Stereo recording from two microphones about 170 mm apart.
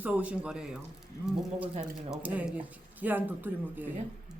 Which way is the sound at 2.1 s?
10° right (ahead or behind).